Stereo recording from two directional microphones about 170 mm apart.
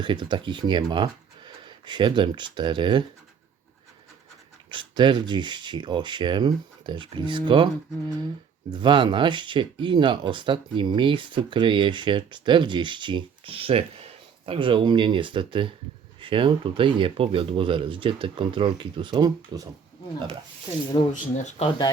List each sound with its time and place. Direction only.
0.0 s speech: 25° right (ahead or behind)
4.7 s speech: 25° right (ahead or behind)
8.7 s speech: 25° right (ahead or behind)
21.1 s speech: 45° left (ahead or behind)